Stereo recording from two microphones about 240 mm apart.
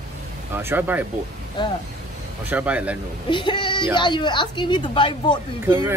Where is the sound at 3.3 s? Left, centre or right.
Centre.